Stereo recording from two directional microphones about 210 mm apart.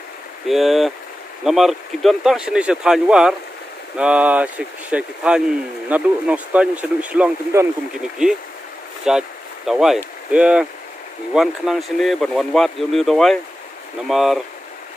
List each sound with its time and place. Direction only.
0.5 s speech: centre (ahead or behind)